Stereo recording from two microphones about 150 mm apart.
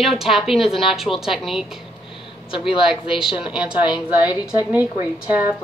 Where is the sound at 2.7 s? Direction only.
5° right (ahead or behind).